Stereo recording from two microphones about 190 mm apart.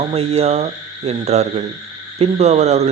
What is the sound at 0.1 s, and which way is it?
Speech, 30° right (ahead or behind).